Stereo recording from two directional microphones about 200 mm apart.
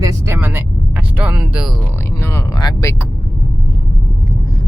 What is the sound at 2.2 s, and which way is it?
Speech, 15° left (ahead or behind).